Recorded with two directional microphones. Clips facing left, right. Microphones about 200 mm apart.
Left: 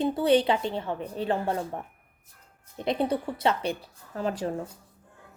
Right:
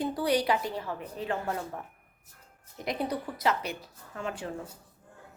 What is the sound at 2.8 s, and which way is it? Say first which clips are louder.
A woman's voice: left 5 dB; 25° left (ahead or behind).